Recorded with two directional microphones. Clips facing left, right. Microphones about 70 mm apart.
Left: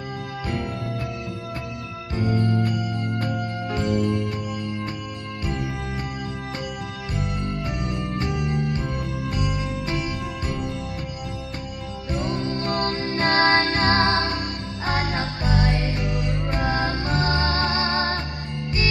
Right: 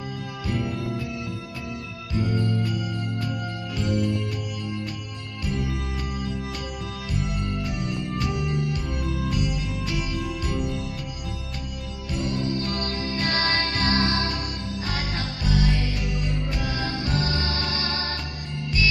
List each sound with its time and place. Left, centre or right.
9.8 s music: left
12.1 s music: left